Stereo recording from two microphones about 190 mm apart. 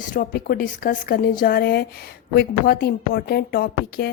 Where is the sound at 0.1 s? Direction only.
45° left (ahead or behind).